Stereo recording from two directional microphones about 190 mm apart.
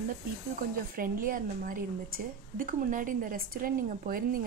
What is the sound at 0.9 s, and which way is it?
A woman's voice, 45° right (ahead or behind).